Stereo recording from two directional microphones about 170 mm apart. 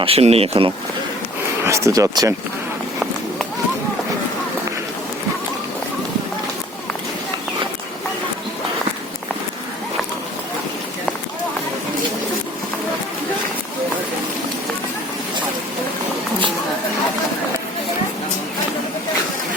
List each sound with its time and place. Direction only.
0.0 s speech: 35° right (ahead or behind)
1.6 s speech: 15° right (ahead or behind)